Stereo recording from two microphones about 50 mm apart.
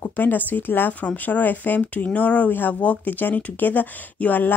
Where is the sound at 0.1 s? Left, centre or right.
Left.